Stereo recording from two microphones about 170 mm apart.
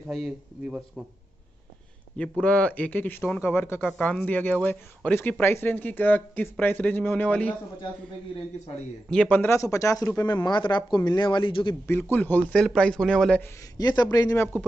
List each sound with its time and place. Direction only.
0.1 s a man's voice: centre (ahead or behind)
2.4 s speech: 10° left (ahead or behind)
9.1 s speech: 5° left (ahead or behind); by 11.7 s 30° left (ahead or behind)
11.9 s a man's voice: 10° left (ahead or behind)
13.7 s a man's voice: 25° left (ahead or behind)